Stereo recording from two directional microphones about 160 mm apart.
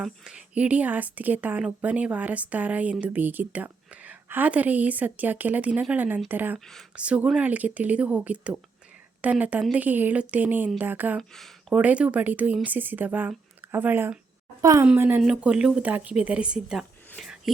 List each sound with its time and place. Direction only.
0.0 s speech: 5° right (ahead or behind)
6.7 s speech: centre (ahead or behind)
11.2 s a woman's voice: centre (ahead or behind)
17.2 s a sound: centre (ahead or behind)